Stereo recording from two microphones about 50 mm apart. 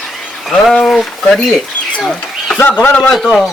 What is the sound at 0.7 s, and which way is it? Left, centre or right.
Speech, centre.